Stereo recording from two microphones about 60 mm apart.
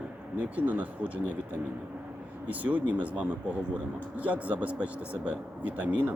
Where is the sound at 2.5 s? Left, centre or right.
Right.